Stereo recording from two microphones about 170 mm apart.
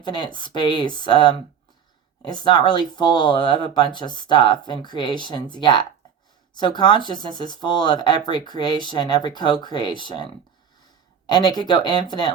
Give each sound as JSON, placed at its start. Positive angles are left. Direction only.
{"t": 0.0, "sound": "speech", "side_deg": 25}